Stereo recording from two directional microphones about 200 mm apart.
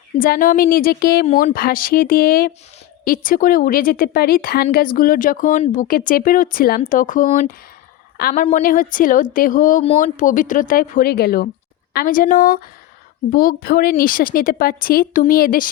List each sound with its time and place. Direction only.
0.2 s a woman's voice: 45° left (ahead or behind)